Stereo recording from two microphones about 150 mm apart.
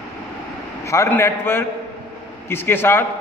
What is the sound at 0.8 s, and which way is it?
A man's voice, 20° left (ahead or behind).